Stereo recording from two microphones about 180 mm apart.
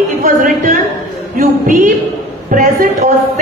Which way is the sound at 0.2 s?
45° right (ahead or behind).